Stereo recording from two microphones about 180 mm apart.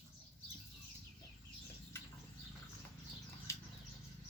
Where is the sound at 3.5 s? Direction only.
15° left (ahead or behind).